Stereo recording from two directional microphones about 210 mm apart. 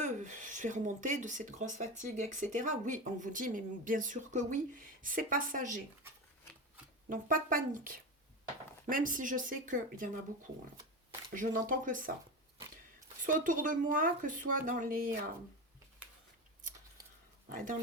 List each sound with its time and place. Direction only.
0.0 s speech: 35° right (ahead or behind)
7.1 s speech: 40° right (ahead or behind)
13.2 s speech: 40° right (ahead or behind)